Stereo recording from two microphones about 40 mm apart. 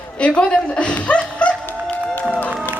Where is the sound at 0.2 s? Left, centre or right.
Left.